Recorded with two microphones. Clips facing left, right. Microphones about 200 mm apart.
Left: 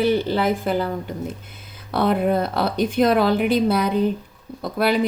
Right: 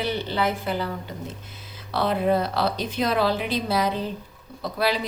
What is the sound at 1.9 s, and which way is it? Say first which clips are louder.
Speech: left 3 dB; 55° left (ahead or behind).